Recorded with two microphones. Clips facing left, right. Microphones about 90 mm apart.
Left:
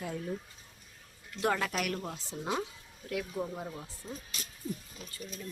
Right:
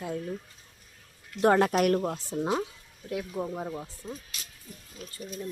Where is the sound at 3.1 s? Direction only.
15° right (ahead or behind).